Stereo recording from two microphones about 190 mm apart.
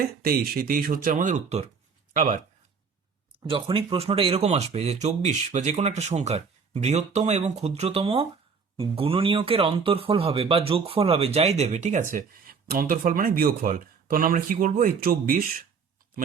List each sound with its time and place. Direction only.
0.0 s speech: 55° right (ahead or behind)
3.5 s speech: 30° right (ahead or behind); by 15.6 s 50° right (ahead or behind)